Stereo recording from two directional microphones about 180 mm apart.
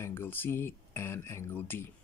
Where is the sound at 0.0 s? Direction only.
10° left (ahead or behind).